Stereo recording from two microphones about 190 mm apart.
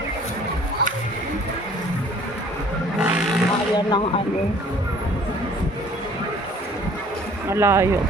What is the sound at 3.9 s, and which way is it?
Speech, 25° left (ahead or behind).